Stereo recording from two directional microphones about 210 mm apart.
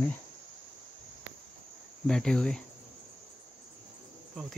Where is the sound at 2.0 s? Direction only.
Centre (ahead or behind).